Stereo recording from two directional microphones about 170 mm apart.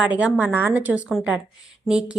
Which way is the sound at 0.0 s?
10° right (ahead or behind).